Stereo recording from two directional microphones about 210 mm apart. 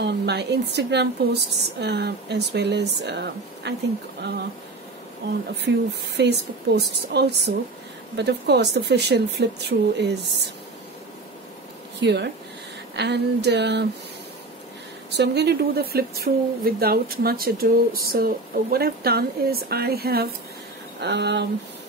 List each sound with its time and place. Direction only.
0.0 s speech: 55° right (ahead or behind)
5.5 s speech: 55° right (ahead or behind)
12.0 s speech: 55° right (ahead or behind)
15.0 s speech: 50° right (ahead or behind)